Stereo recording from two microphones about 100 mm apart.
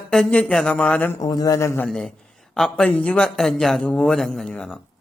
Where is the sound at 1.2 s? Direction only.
40° left (ahead or behind).